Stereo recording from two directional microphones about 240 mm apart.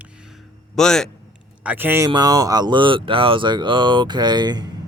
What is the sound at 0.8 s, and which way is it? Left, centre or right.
Speech, centre.